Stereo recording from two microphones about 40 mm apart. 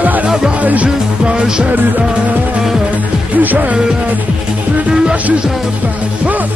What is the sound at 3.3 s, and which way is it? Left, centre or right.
Music, right.